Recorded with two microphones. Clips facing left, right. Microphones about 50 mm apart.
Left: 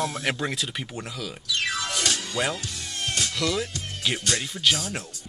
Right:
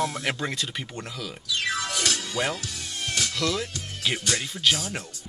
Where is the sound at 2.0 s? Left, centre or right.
Left.